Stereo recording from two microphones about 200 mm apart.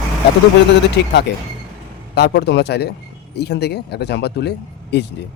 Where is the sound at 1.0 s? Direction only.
55° left (ahead or behind).